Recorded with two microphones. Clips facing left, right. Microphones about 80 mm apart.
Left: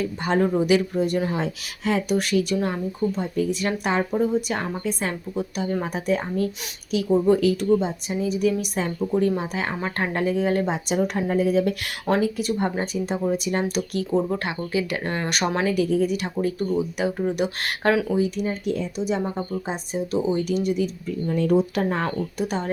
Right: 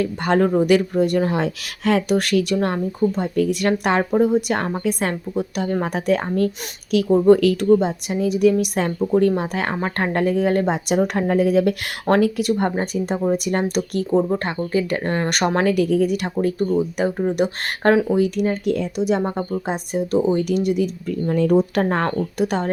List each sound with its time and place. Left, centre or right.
0.0 s speech: right
5.9 s speech: right
7.9 s speech: right
13.3 s speech: right
14.2 s speech: right
15.3 s speech: right
18.2 s speech: right
19.2 s speech: right
21.1 s speech: right